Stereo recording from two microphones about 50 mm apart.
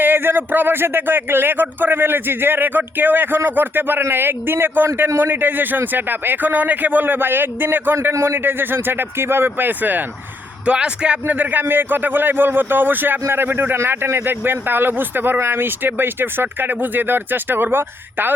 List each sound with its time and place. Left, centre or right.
0.0 s a man's voice: right
9.6 s a man's voice: right
10.7 s speech: right
11.3 s a man's voice: right